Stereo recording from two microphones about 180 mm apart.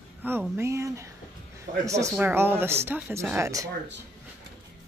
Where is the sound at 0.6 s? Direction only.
15° right (ahead or behind).